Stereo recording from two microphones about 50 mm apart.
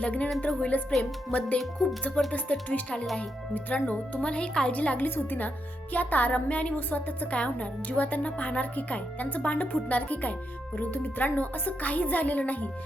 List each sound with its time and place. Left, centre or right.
0.0 s speech: left
1.8 s speech: centre
2.3 s speech: left
5.0 s a woman's voice: left